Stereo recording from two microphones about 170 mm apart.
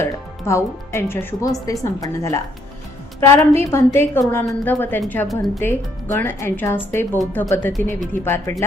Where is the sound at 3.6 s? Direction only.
15° left (ahead or behind).